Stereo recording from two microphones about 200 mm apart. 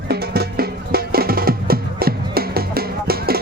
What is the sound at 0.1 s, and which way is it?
Music, 50° right (ahead or behind).